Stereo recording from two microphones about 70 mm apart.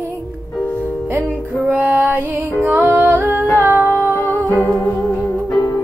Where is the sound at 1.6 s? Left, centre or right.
Right.